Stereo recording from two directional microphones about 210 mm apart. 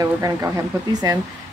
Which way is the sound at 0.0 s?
15° right (ahead or behind).